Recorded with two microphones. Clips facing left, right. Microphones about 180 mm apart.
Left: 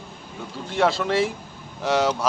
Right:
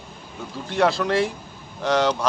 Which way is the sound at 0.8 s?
Centre (ahead or behind).